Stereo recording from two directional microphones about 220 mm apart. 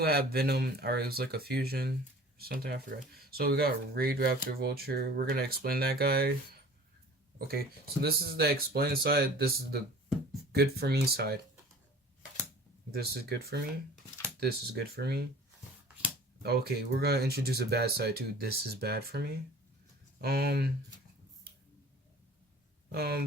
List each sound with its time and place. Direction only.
0.0 s speech: 45° right (ahead or behind)
7.3 s speech: 45° right (ahead or behind)
12.9 s speech: 45° right (ahead or behind)
16.4 s speech: 45° right (ahead or behind)
22.9 s speech: 45° right (ahead or behind)